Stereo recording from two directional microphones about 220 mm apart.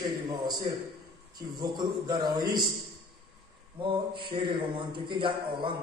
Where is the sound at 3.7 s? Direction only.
20° right (ahead or behind).